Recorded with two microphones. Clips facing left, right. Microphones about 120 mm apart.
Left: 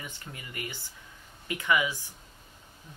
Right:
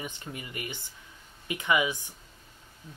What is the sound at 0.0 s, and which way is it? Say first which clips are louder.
Speech: right 5 dB; 20° right (ahead or behind).